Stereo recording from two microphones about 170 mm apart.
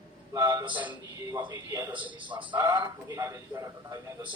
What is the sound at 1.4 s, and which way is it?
A man's voice, 25° right (ahead or behind).